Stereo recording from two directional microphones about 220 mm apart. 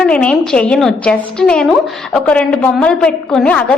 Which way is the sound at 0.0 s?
5° left (ahead or behind).